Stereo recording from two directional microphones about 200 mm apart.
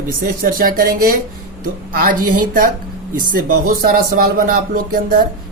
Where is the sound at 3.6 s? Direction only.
45° right (ahead or behind).